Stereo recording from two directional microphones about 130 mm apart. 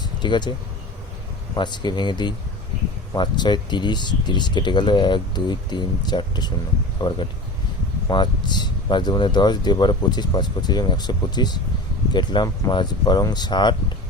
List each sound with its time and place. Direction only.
0.2 s speech: 35° left (ahead or behind)
1.5 s speech: 35° left (ahead or behind)